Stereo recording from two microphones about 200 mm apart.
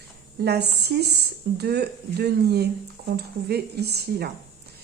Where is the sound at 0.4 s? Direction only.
55° right (ahead or behind).